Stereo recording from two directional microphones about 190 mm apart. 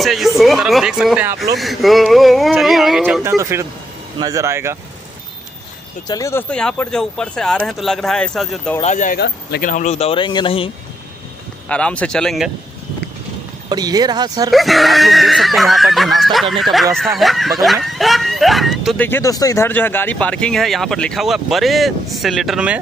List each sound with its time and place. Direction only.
0.0 s speech: centre (ahead or behind)
3.3 s speech: 15° right (ahead or behind)
6.0 s speech: 15° left (ahead or behind)
6.5 s speech: 5° left (ahead or behind)
8.8 s speech: 40° left (ahead or behind)
9.2 s speech: 55° left (ahead or behind)
9.7 s speech: 40° left (ahead or behind)
11.7 s speech: 5° left (ahead or behind)
13.7 s speech: 20° right (ahead or behind)
14.5 s speech: centre (ahead or behind)
19.0 s speech: 15° left (ahead or behind); by 22.8 s 5° right (ahead or behind)